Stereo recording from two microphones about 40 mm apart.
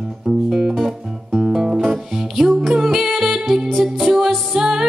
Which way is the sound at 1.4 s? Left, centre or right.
Right.